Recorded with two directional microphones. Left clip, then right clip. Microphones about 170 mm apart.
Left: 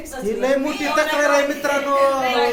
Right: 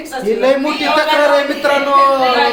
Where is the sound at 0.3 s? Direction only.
10° left (ahead or behind).